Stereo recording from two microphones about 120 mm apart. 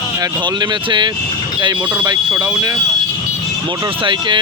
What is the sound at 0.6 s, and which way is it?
Speech, 40° right (ahead or behind).